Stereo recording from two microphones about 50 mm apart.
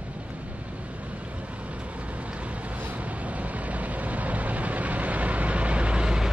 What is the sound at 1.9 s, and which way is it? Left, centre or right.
Vehicle, right.